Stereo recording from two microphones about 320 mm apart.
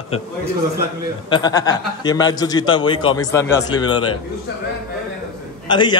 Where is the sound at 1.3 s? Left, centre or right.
Centre.